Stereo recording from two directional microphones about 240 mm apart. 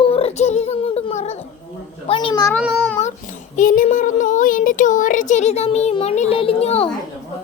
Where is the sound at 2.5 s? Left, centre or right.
Centre.